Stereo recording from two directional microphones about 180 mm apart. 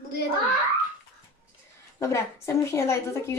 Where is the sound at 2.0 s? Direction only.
15° left (ahead or behind).